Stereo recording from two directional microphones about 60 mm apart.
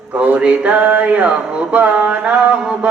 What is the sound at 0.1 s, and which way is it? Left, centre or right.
Music, right.